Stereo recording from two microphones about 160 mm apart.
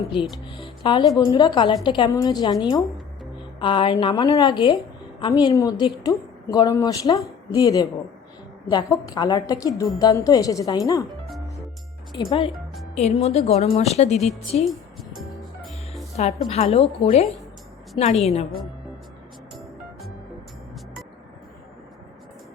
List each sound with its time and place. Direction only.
0.1 s a woman's voice: 30° left (ahead or behind)
12.1 s a woman's voice: 35° left (ahead or behind)
16.1 s a woman's voice: 40° left (ahead or behind)
19.5 s music: centre (ahead or behind)